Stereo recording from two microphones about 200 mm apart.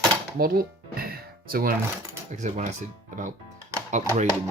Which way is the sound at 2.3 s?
35° right (ahead or behind).